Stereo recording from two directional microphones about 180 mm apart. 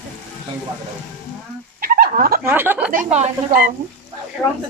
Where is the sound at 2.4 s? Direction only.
10° right (ahead or behind).